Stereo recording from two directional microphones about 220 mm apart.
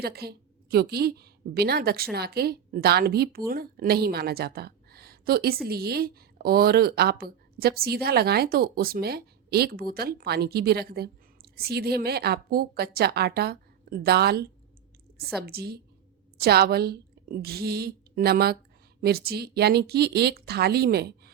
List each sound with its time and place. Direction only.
0.0 s a woman's voice: 45° right (ahead or behind)